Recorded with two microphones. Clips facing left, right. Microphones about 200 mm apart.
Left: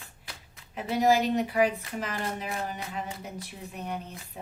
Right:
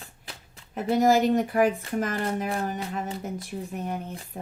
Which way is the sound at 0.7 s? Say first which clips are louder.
Right 3 dB; 45° right (ahead or behind).